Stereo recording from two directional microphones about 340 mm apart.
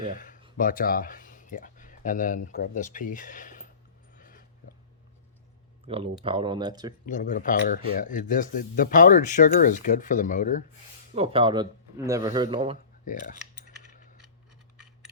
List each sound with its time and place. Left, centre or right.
0.1 s speech: left
4.1 s a sound: left
5.9 s speech: centre
7.1 s speech: left
11.1 s speech: centre